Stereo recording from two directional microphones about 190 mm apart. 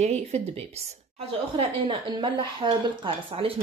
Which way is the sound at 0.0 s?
35° right (ahead or behind).